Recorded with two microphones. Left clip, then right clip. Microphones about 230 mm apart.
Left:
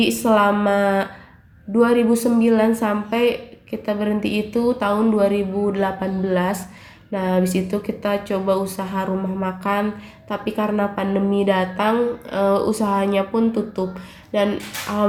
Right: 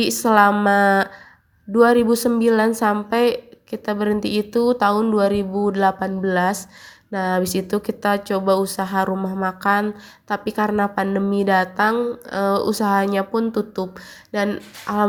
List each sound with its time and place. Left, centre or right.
0.0 s speech: right